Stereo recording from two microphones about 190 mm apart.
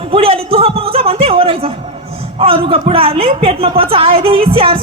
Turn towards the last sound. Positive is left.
turn(degrees=-30)  # may be behind; listen again after turning